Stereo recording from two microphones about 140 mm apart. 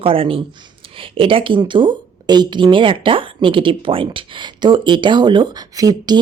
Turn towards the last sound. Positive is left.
turn(degrees=-30)  # may be behind; listen again after turning